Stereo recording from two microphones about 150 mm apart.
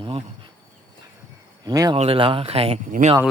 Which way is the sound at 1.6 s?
25° right (ahead or behind).